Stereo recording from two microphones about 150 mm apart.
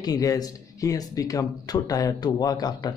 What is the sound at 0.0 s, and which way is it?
Speech, 25° left (ahead or behind).